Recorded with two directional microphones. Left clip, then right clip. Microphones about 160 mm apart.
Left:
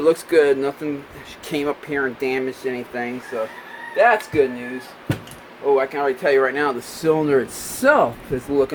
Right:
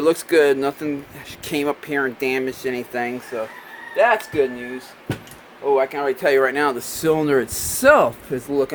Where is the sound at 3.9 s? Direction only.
40° right (ahead or behind).